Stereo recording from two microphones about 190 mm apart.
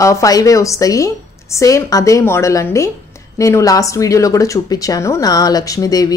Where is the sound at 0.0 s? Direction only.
15° left (ahead or behind).